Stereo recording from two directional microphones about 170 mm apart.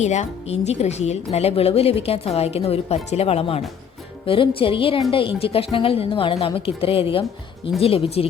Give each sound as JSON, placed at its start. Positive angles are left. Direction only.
{"t": 0.0, "sound": "a woman's voice", "side_deg": 40}